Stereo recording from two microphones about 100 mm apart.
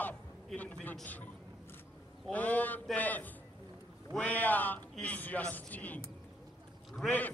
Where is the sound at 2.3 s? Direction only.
15° left (ahead or behind).